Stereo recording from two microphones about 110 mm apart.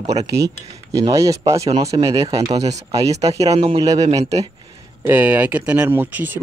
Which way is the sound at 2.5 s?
90° right.